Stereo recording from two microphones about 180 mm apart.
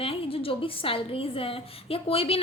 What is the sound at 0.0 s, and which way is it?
A woman's voice, 30° left (ahead or behind).